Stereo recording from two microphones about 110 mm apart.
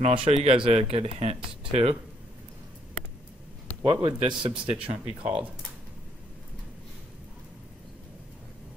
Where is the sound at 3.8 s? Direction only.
50° right (ahead or behind).